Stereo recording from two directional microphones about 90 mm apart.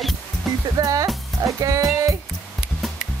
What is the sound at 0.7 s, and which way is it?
Speech, 40° right (ahead or behind).